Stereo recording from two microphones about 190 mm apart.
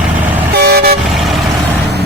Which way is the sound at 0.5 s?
55° right (ahead or behind).